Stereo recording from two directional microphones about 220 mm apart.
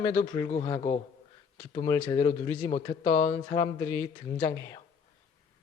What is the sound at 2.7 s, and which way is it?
Speech, 25° left (ahead or behind).